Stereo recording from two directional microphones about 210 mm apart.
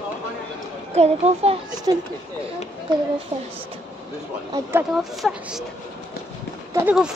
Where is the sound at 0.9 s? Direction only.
30° right (ahead or behind).